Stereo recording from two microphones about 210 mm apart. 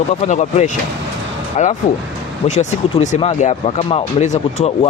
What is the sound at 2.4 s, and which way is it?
Speech, 35° left (ahead or behind).